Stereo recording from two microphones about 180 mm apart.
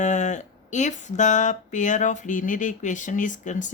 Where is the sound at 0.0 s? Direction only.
40° left (ahead or behind).